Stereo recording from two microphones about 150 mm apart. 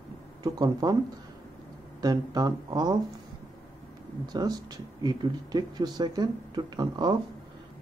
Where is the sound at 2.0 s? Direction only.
25° right (ahead or behind).